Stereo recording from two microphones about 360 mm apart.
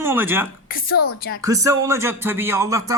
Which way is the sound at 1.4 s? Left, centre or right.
Centre.